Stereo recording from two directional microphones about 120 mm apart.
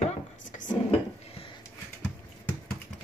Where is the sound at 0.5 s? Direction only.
90° left.